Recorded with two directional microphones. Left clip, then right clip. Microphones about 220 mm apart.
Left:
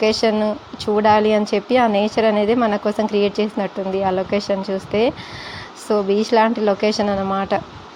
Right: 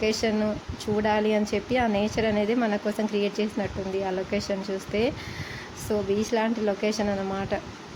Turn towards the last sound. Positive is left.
turn(degrees=20)  # may be behind; listen again after turning